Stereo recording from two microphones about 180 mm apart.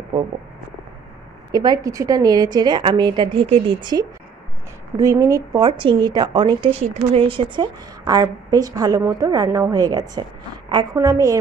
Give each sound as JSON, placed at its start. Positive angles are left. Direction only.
{"t": 1.5, "sound": "a woman's voice", "side_deg": -20}